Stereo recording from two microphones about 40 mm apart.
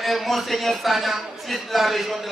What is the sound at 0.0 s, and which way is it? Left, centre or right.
Speech, centre.